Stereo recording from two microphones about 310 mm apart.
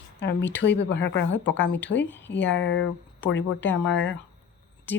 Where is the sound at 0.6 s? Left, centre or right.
Left.